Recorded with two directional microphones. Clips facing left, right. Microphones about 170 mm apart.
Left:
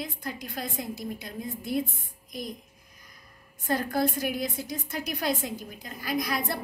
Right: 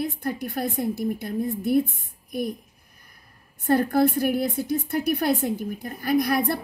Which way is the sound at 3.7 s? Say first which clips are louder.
Right 7 dB; 60° right (ahead or behind).